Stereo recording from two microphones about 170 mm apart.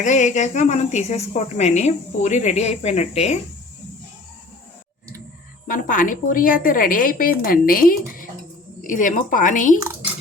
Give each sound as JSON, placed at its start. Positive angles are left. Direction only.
{"t": 0.0, "sound": "a woman's voice", "side_deg": 45}
{"t": 5.6, "sound": "a woman's voice", "side_deg": 55}